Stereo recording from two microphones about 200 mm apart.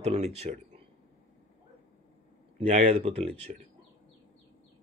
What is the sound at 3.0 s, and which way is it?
Speech, 30° right (ahead or behind).